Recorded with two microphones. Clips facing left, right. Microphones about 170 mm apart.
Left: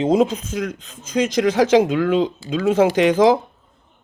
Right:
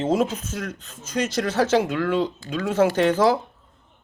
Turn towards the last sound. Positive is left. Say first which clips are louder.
# left 4 dB
turn(degrees=15)  # may be behind; listen again after turning